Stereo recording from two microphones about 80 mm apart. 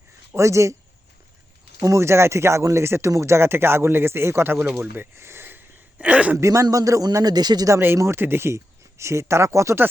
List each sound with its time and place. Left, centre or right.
0.3 s speech: right
1.8 s speech: right; by 6.3 s centre
6.3 s a man's voice: right
7.9 s speech: right